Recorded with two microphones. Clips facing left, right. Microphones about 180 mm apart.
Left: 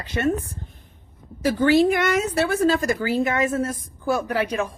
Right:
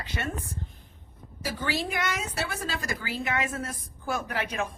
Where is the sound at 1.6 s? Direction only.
55° left (ahead or behind).